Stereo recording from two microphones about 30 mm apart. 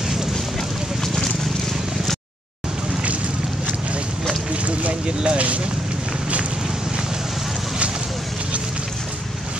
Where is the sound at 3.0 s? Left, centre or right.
Right.